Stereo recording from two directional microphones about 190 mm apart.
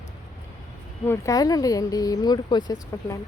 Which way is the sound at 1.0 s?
15° left (ahead or behind).